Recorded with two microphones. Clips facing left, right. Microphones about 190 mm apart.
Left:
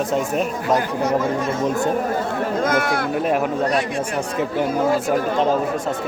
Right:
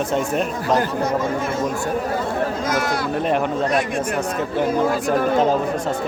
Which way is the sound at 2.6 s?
55° left (ahead or behind).